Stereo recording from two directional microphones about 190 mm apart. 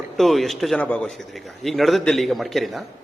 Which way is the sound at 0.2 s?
Centre (ahead or behind).